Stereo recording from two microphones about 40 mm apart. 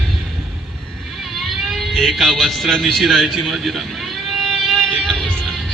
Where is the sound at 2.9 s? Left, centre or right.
Centre.